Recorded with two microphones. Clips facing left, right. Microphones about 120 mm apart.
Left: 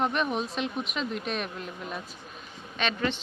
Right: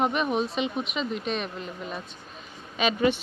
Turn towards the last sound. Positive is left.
turn(degrees=-10)  # may be behind; listen again after turning